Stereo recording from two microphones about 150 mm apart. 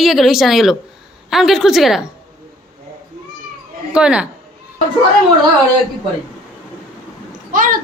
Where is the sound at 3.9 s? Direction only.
5° right (ahead or behind).